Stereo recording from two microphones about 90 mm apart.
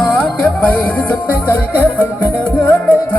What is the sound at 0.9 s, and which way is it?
Music, 20° left (ahead or behind).